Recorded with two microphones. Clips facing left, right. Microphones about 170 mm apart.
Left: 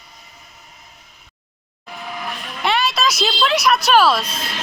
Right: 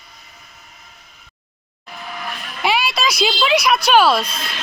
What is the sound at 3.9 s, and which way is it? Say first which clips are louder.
Speech: right 2 dB; centre (ahead or behind).